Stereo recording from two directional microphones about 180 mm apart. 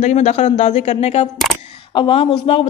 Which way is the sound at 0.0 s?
40° left (ahead or behind).